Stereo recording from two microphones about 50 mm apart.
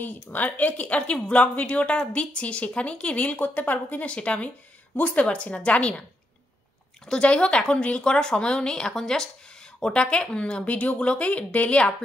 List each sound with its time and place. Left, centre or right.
0.0 s speech: left
4.0 s speech: left
7.1 s speech: centre